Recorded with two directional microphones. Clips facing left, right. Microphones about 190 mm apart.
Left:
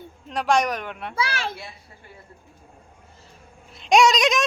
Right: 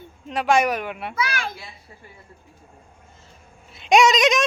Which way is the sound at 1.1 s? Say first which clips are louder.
Left 2 dB; 25° left (ahead or behind).